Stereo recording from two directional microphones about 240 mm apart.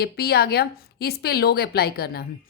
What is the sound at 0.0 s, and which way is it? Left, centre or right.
Speech, left.